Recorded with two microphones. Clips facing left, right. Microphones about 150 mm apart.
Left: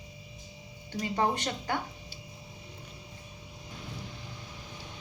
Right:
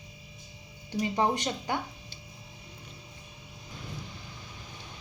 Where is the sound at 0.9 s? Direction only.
15° right (ahead or behind).